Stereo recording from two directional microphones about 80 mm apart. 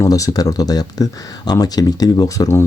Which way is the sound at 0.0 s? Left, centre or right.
Left.